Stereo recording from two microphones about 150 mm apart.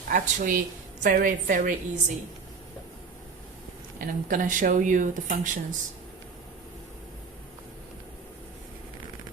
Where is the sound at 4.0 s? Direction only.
65° right (ahead or behind).